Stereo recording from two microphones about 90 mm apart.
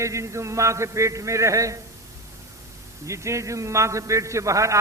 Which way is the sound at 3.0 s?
35° right (ahead or behind).